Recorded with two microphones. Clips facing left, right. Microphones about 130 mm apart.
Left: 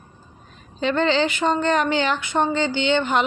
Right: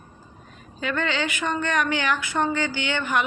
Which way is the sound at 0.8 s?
30° left (ahead or behind).